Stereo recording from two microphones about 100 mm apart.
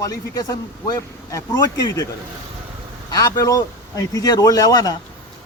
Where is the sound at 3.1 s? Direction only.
40° left (ahead or behind).